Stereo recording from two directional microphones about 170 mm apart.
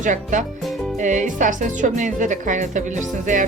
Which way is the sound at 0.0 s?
45° right (ahead or behind).